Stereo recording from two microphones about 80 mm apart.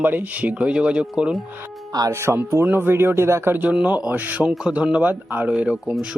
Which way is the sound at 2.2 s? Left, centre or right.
Right.